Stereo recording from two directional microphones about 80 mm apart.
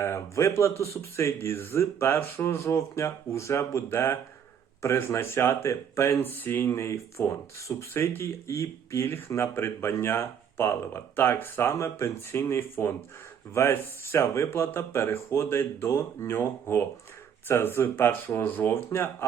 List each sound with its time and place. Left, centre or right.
0.0 s speech: left